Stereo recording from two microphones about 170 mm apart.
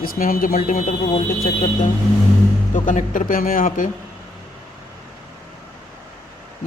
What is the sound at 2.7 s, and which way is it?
Speech, 45° left (ahead or behind).